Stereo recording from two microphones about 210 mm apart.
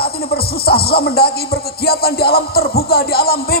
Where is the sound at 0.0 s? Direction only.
50° left (ahead or behind).